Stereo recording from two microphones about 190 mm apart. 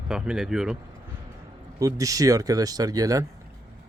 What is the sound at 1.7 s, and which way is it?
Speech, 15° right (ahead or behind).